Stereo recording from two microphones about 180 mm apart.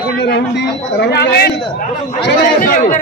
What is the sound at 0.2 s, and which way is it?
A man's voice, 70° left (ahead or behind).